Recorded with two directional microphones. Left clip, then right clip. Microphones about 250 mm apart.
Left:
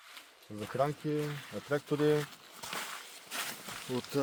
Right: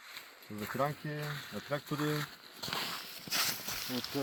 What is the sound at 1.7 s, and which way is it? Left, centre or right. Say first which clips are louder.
Speech: left 6 dB; left.